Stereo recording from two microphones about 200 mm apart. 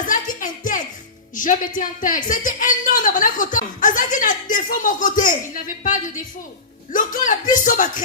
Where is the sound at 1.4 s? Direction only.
40° left (ahead or behind).